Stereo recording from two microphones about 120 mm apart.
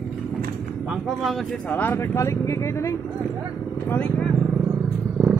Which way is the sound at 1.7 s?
20° left (ahead or behind).